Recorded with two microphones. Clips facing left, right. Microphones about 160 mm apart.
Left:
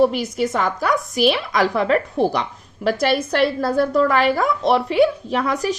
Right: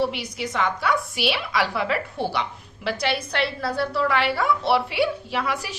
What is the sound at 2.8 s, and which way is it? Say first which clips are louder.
A woman's voice: left 7 dB; 45° left (ahead or behind).